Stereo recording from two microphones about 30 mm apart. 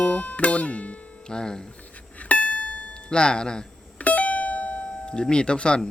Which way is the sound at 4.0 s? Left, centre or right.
Left.